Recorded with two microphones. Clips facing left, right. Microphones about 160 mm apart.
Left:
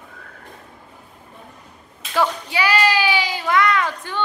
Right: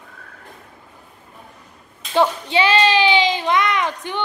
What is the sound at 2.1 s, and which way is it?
Child singing, 25° right (ahead or behind).